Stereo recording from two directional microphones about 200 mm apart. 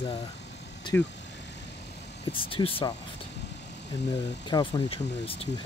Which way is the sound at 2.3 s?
25° left (ahead or behind).